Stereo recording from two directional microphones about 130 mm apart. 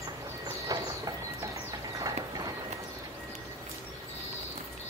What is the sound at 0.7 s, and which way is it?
Train, 30° right (ahead or behind).